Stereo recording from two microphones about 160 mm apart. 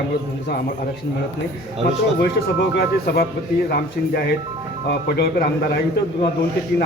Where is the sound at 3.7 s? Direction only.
70° left (ahead or behind).